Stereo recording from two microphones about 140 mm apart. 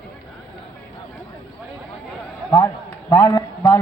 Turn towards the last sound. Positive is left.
turn(degrees=25)  # may be behind; listen again after turning